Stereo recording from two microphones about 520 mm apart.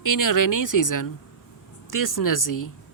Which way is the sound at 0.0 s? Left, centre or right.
Left.